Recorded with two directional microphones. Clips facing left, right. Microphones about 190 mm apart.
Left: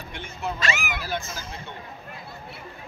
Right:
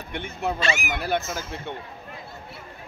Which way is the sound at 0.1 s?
60° right (ahead or behind).